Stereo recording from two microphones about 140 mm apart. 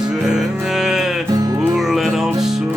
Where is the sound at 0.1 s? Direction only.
5° right (ahead or behind).